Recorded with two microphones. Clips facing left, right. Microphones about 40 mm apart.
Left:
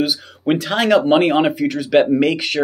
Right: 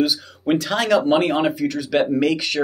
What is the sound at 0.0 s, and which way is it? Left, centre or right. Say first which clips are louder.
Speech: left 1 dB; centre.